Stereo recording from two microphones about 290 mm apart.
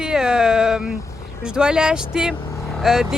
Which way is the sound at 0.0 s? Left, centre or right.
Centre.